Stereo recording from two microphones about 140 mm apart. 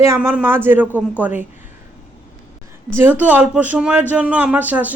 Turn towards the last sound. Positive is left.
turn(degrees=-10)  # may be behind; listen again after turning